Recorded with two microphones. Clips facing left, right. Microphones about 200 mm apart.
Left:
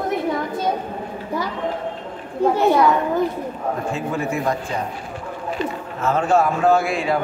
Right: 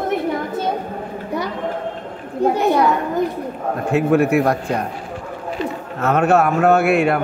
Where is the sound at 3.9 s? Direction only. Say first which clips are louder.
Right 9 dB; 65° right (ahead or behind).